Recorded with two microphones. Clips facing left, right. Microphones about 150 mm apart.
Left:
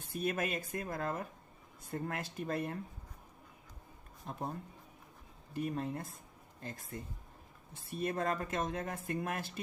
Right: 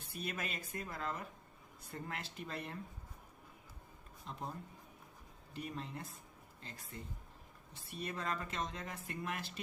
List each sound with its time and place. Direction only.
0.0 s speech: 50° left (ahead or behind)
4.3 s speech: 50° left (ahead or behind)
5.5 s speech: 50° left (ahead or behind)